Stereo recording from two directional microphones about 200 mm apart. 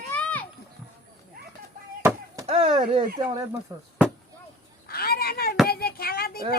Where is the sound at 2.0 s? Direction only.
15° right (ahead or behind).